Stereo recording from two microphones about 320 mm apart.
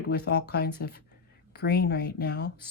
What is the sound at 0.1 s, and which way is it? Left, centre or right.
Speech, left.